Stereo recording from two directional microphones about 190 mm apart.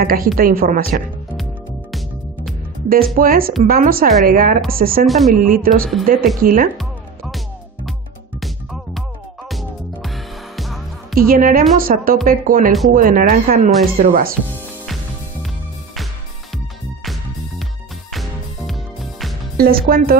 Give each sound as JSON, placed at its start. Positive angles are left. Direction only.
{"t": 0.0, "sound": "speech", "side_deg": -50}
{"t": 1.3, "sound": "music", "side_deg": 0}
{"t": 3.2, "sound": "speech", "side_deg": -50}
{"t": 5.0, "sound": "a man's voice", "side_deg": 0}
{"t": 5.3, "sound": "speech", "side_deg": -45}
{"t": 6.8, "sound": "music", "side_deg": 0}
{"t": 9.5, "sound": "music", "side_deg": 0}
{"t": 11.1, "sound": "speech", "side_deg": -50}
{"t": 17.0, "sound": "music", "side_deg": 0}
{"t": 18.7, "sound": "music", "side_deg": 0}
{"t": 19.5, "sound": "speech", "side_deg": -50}